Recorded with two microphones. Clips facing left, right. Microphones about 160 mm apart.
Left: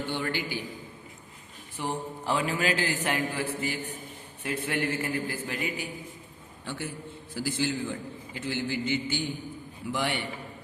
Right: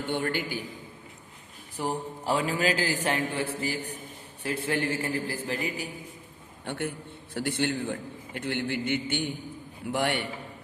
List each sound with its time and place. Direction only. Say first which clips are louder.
0.1 s a man's voice: right 5 dB; 50° right (ahead or behind)
1.7 s a man's voice: right 2 dB; 40° right (ahead or behind)
6.7 s a man's voice: right 3 dB; 60° right (ahead or behind)